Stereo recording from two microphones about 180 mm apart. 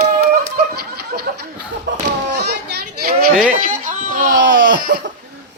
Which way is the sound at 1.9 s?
80° right.